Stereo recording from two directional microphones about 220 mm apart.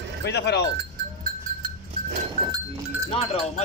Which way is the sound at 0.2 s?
50° left (ahead or behind).